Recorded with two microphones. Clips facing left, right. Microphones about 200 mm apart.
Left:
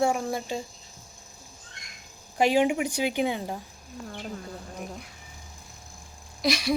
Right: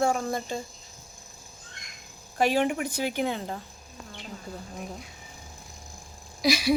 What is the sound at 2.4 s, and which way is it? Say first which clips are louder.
Speech: left 2 dB; 15° left (ahead or behind).